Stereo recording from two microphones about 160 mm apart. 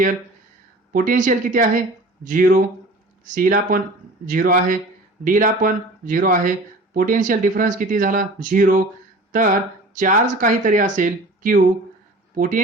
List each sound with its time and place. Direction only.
0.9 s speech: 55° right (ahead or behind)
10.0 s speech: 55° right (ahead or behind)